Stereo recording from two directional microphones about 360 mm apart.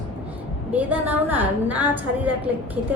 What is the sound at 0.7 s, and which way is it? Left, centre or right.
A woman's voice, centre.